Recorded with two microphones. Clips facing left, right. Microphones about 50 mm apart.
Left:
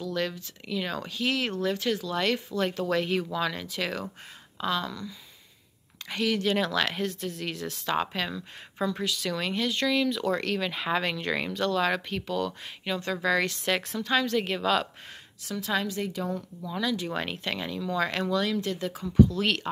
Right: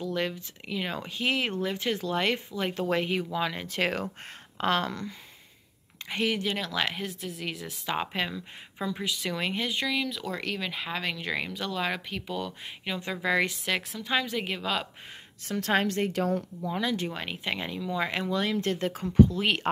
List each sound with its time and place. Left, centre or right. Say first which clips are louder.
0.0 s speech: even; right
3.3 s speech: even; centre
3.6 s a woman's voice: right 3 dB; right
6.1 s speech: left 1 dB; right
6.7 s a woman's voice: left 3 dB; centre
9.8 s speech: left 5 dB; centre
13.6 s speech: left 3 dB; centre
14.0 s a woman's voice: left 4 dB; centre
15.6 s a woman's voice: right 3 dB; right
16.6 s speech: left 1 dB; right
17.1 s speech: left 4 dB; centre
17.4 s a woman's voice: even; centre
18.3 s speech: even; right